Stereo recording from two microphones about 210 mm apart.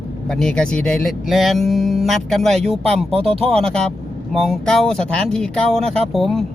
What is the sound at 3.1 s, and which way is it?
Speech, 30° right (ahead or behind).